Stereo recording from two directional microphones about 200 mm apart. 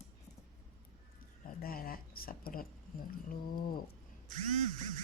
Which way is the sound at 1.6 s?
45° left (ahead or behind).